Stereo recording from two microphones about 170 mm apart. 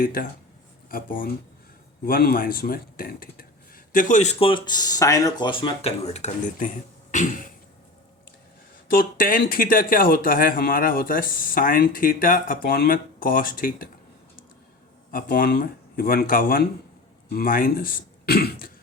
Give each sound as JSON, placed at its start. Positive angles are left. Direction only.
{"t": 0.0, "sound": "speech", "side_deg": 55}
{"t": 7.1, "sound": "cough", "side_deg": 50}
{"t": 8.9, "sound": "speech", "side_deg": 60}
{"t": 15.1, "sound": "speech", "side_deg": 55}